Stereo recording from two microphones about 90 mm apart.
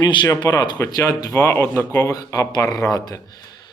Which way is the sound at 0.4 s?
50° left (ahead or behind).